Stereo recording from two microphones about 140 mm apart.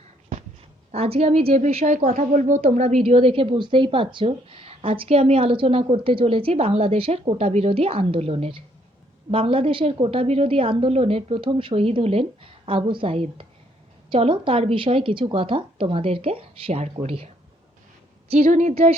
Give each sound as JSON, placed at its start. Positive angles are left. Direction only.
{"t": 0.9, "sound": "a woman's voice", "side_deg": -45}
{"t": 2.0, "sound": "a woman's voice", "side_deg": -65}
{"t": 18.4, "sound": "a woman's voice", "side_deg": -60}